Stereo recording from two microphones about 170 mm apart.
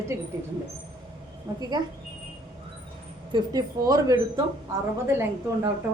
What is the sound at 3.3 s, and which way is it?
Speech, 20° right (ahead or behind).